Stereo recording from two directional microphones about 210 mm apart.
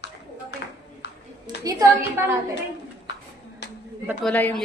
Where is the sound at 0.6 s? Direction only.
55° left (ahead or behind).